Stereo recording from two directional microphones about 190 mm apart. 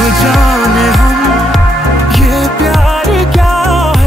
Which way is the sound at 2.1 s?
Centre (ahead or behind).